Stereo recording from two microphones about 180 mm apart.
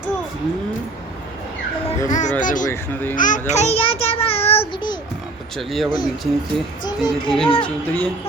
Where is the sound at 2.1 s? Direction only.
40° left (ahead or behind).